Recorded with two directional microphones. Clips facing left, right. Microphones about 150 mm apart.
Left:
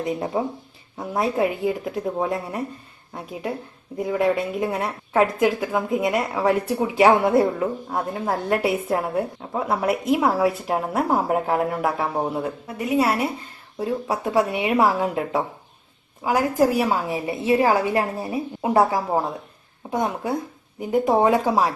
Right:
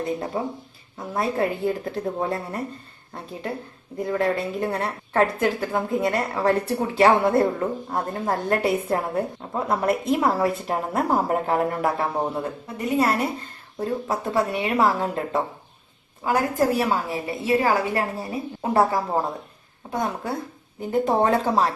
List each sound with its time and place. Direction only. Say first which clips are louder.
0.0 s a woman's voice: left 2 dB; 15° left (ahead or behind)
3.9 s a woman's voice: left 2 dB; 15° left (ahead or behind)